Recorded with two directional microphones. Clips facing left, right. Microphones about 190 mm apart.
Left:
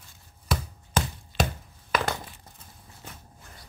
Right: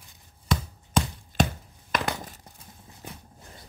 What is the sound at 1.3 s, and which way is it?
Chopping, 45° right (ahead or behind).